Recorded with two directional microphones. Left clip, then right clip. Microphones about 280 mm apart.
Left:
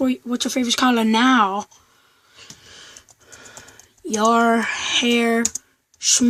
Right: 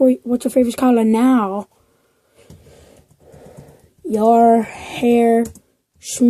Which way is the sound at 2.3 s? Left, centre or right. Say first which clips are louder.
Left 5 dB; centre.